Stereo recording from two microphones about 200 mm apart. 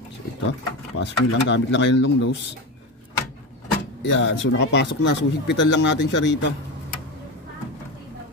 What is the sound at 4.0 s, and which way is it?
Speech, 60° left (ahead or behind).